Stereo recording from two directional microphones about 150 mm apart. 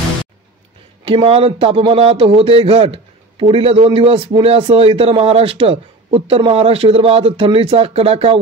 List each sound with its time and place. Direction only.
1.0 s a man's voice: 35° right (ahead or behind)